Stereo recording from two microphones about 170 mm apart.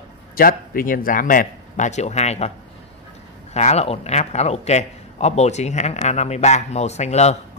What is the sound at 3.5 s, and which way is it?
A man's voice, 40° left (ahead or behind).